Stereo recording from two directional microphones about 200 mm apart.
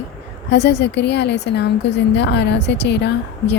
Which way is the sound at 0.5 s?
60° left (ahead or behind).